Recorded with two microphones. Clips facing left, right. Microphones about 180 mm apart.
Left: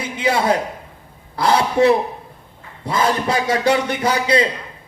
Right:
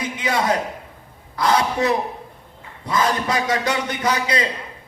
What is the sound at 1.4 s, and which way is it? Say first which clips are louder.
A man's voice: left 4 dB; 30° left (ahead or behind).